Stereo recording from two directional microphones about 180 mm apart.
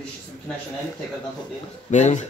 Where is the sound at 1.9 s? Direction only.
40° left (ahead or behind).